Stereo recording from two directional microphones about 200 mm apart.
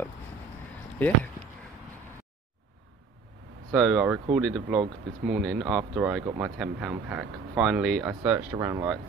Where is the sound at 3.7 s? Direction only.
Centre (ahead or behind).